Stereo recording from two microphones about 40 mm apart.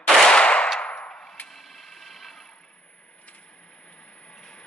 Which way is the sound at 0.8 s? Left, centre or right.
Left.